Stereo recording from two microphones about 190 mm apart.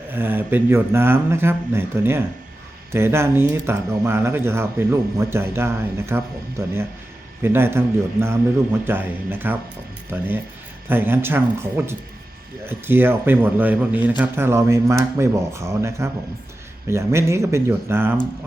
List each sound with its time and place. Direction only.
0.1 s speech: 10° right (ahead or behind)